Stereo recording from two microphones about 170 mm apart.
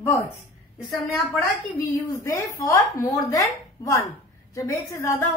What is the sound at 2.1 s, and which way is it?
A woman's voice, 20° left (ahead or behind).